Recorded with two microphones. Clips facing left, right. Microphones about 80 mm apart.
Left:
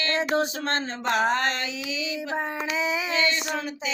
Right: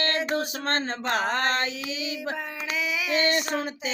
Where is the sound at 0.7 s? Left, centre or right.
Right.